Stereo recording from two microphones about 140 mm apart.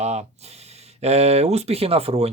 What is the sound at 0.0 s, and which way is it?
Speech, 50° right (ahead or behind).